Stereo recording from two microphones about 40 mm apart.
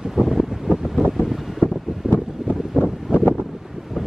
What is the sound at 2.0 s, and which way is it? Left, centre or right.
Wind, centre.